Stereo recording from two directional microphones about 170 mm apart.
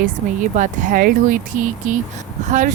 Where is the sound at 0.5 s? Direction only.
45° right (ahead or behind).